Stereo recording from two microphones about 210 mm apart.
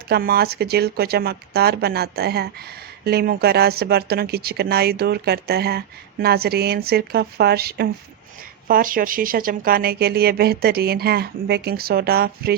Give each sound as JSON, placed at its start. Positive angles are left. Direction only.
{"t": 0.1, "sound": "speech", "side_deg": -45}